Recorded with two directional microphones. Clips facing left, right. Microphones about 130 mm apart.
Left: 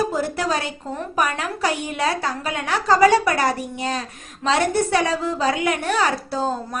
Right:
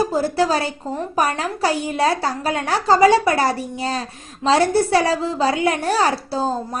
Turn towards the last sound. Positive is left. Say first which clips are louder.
# right 2 dB
turn(degrees=-30)  # may be behind; listen again after turning